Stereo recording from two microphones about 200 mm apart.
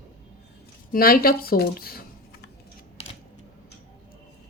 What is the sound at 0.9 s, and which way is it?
Speech, 45° left (ahead or behind).